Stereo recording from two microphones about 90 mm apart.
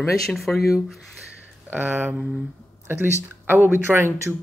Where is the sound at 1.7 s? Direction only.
20° right (ahead or behind).